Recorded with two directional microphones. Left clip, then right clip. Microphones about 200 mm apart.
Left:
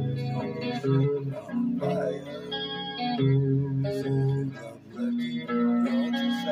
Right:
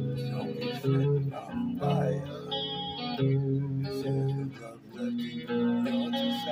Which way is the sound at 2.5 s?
15° left (ahead or behind).